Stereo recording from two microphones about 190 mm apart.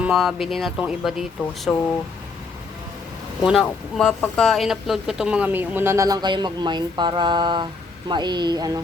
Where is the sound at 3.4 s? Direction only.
Centre (ahead or behind); by 8.8 s 20° right (ahead or behind).